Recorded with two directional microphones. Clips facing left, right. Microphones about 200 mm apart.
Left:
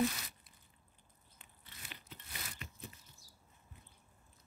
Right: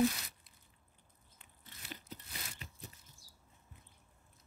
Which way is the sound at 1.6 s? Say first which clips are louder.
Right 5 dB; 40° right (ahead or behind).